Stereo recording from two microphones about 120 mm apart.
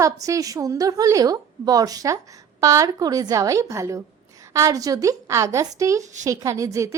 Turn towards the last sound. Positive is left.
turn(degrees=-25)  # may be behind; listen again after turning